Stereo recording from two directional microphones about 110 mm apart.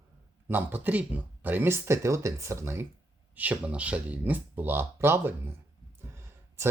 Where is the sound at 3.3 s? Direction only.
15° right (ahead or behind).